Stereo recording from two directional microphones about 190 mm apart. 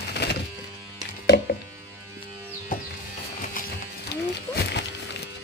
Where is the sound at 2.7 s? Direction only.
45° left (ahead or behind).